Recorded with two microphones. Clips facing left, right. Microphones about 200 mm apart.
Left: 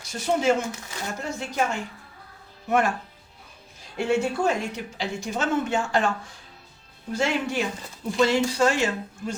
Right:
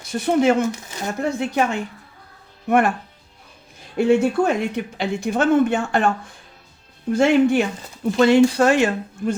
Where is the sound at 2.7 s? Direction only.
55° right (ahead or behind).